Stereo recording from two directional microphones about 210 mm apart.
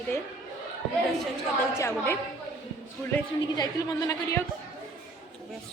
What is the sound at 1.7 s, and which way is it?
Speech, 10° left (ahead or behind).